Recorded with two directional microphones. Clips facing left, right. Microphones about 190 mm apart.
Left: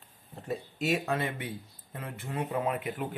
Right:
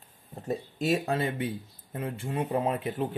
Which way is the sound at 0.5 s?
35° right (ahead or behind).